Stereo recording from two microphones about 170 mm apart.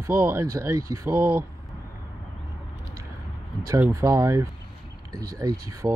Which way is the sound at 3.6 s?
15° right (ahead or behind).